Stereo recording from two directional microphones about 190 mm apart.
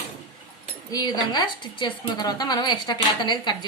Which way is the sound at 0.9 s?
20° left (ahead or behind).